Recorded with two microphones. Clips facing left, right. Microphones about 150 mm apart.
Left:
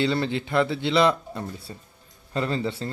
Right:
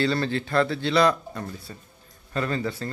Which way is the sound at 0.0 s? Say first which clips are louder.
Even; 20° left (ahead or behind).